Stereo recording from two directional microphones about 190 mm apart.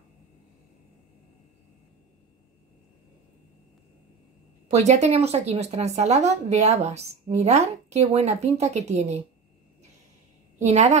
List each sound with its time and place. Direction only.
4.6 s speech: 35° right (ahead or behind)
10.6 s speech: 35° right (ahead or behind)